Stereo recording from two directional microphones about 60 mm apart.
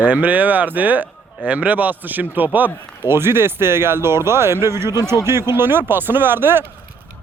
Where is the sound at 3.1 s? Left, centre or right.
Right.